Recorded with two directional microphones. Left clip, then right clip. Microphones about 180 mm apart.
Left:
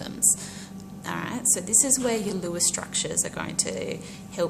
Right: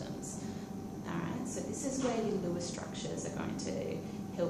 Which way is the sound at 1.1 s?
45° left (ahead or behind).